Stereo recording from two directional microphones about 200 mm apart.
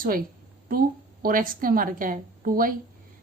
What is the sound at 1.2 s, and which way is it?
A woman's voice, 45° right (ahead or behind).